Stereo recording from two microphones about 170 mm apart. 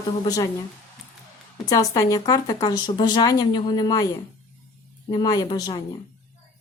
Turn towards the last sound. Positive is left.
turn(degrees=25)  # may be behind; listen again after turning